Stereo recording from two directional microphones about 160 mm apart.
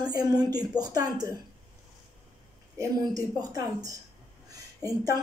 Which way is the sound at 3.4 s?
20° right (ahead or behind).